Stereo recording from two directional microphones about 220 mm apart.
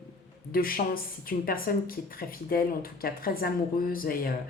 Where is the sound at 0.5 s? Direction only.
40° left (ahead or behind).